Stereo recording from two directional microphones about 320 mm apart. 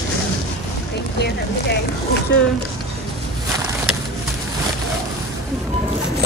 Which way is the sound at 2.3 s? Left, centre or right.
Left.